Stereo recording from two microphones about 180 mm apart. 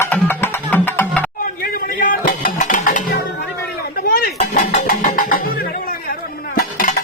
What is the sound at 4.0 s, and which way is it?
Dishes, 55° left (ahead or behind).